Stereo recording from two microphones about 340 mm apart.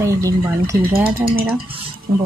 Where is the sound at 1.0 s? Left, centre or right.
Right.